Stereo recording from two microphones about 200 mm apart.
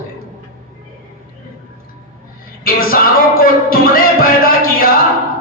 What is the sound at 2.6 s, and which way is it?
Music, 45° left (ahead or behind).